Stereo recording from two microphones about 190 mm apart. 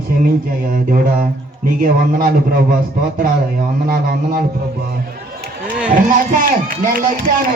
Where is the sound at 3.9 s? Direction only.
55° right (ahead or behind).